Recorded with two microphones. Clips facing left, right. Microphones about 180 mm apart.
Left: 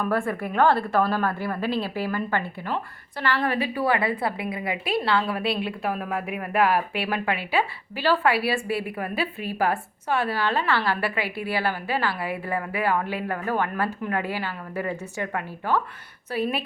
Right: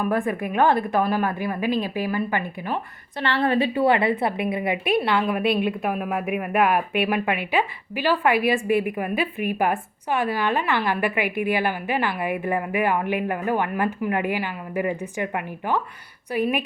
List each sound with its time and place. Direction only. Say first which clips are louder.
0.0 s a woman's voice: right 2 dB; 15° right (ahead or behind)